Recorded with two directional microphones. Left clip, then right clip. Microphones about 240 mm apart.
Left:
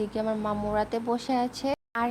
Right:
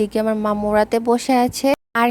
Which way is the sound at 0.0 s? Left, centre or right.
Right.